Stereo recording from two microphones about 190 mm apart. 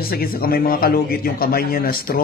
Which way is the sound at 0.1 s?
50° left (ahead or behind).